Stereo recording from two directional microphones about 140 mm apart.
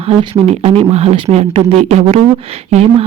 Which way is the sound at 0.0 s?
45° right (ahead or behind).